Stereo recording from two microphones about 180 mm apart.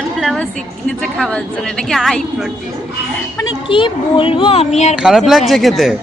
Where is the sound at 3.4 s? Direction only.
30° left (ahead or behind).